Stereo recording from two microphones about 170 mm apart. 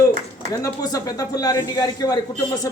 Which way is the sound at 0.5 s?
20° left (ahead or behind).